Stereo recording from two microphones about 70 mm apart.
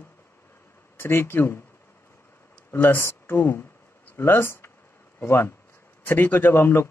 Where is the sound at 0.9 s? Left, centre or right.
Left.